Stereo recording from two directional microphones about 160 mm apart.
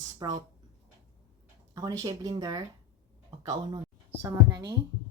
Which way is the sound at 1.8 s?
25° right (ahead or behind).